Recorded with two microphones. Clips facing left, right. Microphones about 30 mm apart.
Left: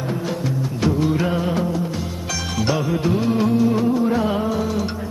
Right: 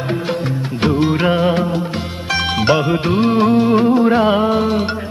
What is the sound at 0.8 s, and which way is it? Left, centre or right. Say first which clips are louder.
Music: right 5 dB; right.